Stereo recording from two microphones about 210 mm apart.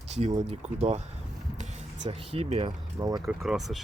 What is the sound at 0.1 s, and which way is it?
Speech, 30° right (ahead or behind).